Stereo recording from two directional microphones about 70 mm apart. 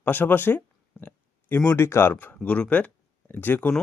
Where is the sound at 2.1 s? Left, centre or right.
Left.